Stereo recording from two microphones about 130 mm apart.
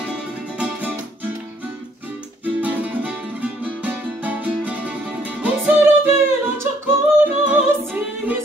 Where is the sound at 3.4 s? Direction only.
10° right (ahead or behind).